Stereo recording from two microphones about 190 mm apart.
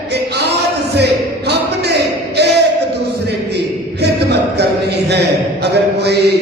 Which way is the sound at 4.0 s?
60° right (ahead or behind).